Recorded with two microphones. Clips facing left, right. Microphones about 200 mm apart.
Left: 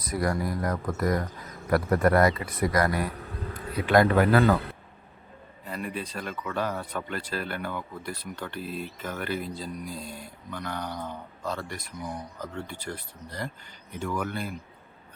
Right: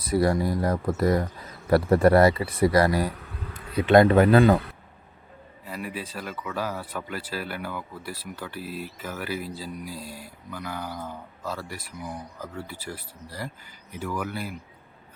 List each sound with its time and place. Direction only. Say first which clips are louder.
0.0 s speech: right 5 dB; 30° right (ahead or behind)
5.6 s speech: even; 5° right (ahead or behind)